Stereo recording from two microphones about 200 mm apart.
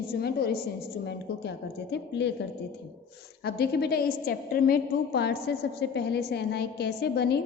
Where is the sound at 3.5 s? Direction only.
55° left (ahead or behind).